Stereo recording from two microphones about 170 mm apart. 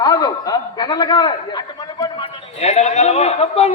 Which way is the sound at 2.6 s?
40° left (ahead or behind).